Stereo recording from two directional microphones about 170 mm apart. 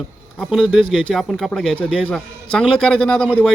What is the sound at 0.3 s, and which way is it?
Speech, centre (ahead or behind).